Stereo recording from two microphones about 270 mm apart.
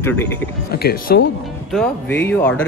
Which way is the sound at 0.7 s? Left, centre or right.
Left.